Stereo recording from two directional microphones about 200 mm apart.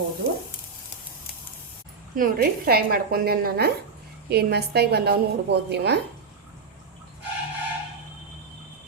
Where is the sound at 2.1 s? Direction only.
45° right (ahead or behind).